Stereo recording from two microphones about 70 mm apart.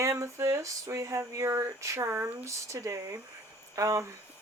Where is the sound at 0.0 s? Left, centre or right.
Right.